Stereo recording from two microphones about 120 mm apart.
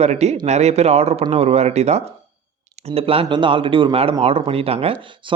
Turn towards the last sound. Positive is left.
turn(degrees=-45)  # may be behind; listen again after turning